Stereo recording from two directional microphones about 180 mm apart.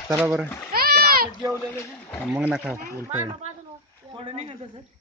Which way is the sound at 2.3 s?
10° right (ahead or behind).